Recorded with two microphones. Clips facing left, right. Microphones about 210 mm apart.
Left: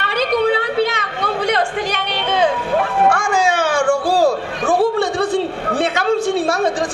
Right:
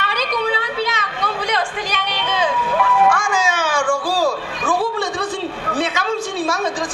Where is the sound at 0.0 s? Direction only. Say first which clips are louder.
Left 5 dB; 55° left (ahead or behind).